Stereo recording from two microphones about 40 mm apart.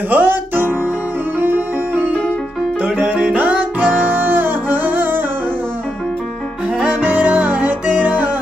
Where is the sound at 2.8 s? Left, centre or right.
Right.